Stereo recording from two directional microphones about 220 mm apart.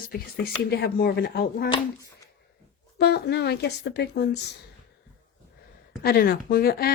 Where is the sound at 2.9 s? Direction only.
50° left (ahead or behind).